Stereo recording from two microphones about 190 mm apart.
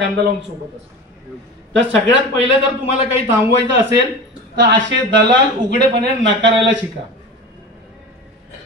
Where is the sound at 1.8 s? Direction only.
75° right (ahead or behind).